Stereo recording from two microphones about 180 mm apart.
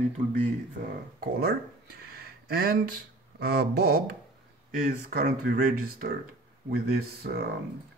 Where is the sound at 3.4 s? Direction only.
60° right (ahead or behind).